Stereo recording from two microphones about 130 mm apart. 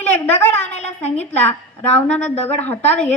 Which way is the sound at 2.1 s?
10° left (ahead or behind).